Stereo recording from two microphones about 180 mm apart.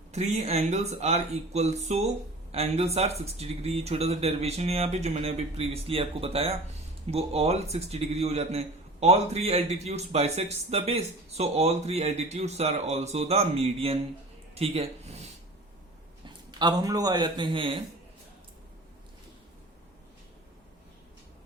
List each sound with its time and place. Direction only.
0.1 s a man's voice: 40° right (ahead or behind)
16.2 s a man's voice: 25° right (ahead or behind)